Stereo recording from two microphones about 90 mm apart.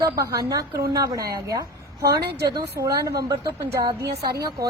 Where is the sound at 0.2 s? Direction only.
40° right (ahead or behind).